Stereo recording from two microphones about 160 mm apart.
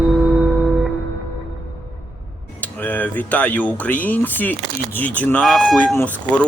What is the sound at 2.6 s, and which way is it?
Speech, 10° left (ahead or behind).